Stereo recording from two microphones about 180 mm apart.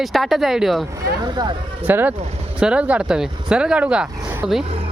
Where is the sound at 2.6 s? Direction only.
5° right (ahead or behind).